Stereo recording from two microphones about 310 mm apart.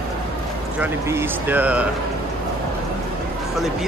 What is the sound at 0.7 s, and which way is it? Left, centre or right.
Speech, centre.